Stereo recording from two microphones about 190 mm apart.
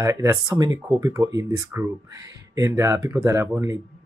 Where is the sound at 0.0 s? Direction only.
20° right (ahead or behind).